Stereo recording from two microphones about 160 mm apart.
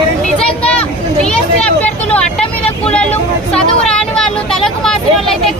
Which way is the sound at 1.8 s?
5° left (ahead or behind).